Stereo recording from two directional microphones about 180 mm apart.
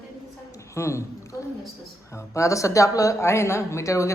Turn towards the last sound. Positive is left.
turn(degrees=15)  # may be behind; listen again after turning